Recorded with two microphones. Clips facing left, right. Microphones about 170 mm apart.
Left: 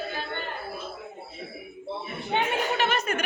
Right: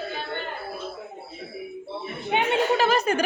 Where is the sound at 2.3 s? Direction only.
15° right (ahead or behind).